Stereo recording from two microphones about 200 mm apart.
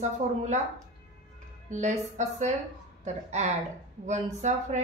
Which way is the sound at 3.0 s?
35° right (ahead or behind).